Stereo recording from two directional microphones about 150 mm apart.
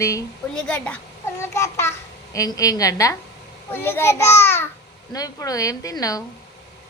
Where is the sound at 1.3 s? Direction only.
20° left (ahead or behind).